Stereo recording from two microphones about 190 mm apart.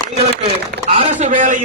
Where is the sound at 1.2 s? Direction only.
40° right (ahead or behind).